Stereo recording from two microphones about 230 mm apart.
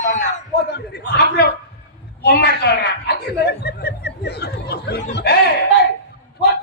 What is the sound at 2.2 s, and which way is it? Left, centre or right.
Speech, left.